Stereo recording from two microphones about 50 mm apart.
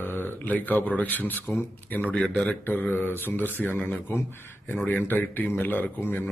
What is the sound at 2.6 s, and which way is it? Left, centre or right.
Speech, left.